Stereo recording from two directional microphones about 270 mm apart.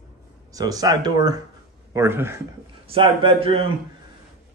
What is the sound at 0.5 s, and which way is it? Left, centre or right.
A man's voice, centre.